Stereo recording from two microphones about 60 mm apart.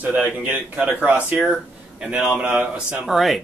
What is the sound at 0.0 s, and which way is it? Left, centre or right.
A man's voice, right.